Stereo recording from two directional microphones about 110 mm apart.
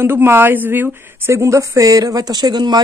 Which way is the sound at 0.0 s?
20° right (ahead or behind).